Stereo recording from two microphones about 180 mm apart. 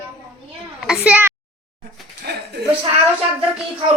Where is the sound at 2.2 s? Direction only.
60° right (ahead or behind).